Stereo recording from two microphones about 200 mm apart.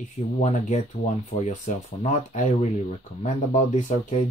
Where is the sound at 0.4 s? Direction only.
35° left (ahead or behind).